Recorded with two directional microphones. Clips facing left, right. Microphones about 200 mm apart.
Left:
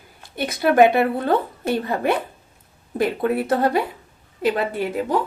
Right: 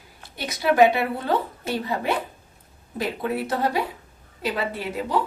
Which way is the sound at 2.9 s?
55° left (ahead or behind).